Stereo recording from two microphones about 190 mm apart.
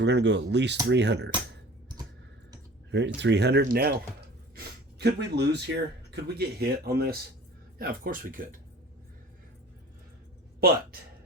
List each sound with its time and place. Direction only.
0.0 s speech: 65° right (ahead or behind)
2.9 s speech: 65° right (ahead or behind)
3.6 s speech: 50° right (ahead or behind)